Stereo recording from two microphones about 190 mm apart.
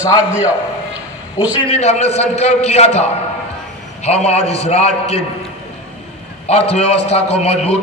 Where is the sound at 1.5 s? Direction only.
30° left (ahead or behind).